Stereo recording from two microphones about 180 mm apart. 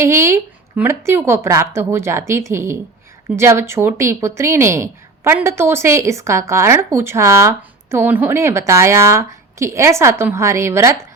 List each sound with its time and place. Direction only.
0.0 s speech: 15° right (ahead or behind)